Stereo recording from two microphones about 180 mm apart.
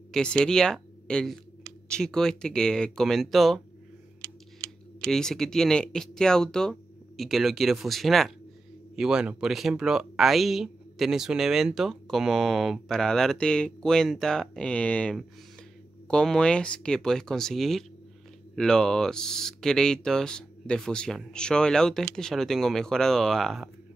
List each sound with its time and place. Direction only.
0.1 s speech: 5° left (ahead or behind)
5.0 s speech: centre (ahead or behind)